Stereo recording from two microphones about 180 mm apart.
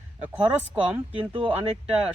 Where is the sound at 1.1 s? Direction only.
30° right (ahead or behind).